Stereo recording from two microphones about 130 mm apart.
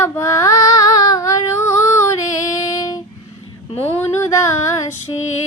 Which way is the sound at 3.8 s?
20° left (ahead or behind).